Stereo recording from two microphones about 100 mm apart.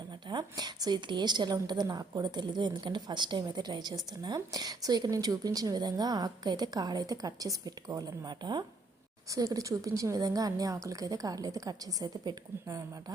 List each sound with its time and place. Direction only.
0.3 s a woman's voice: 45° right (ahead or behind)
9.3 s speech: 35° right (ahead or behind)